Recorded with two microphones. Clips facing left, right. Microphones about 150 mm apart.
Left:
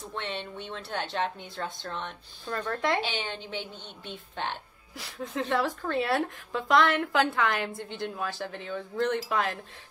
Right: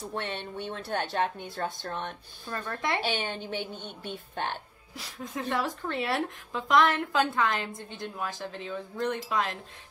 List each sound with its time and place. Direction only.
0.1 s speech: 50° right (ahead or behind)
2.4 s speech: 15° right (ahead or behind)
3.2 s speech: 50° right (ahead or behind)
5.2 s a woman's voice: 15° right (ahead or behind)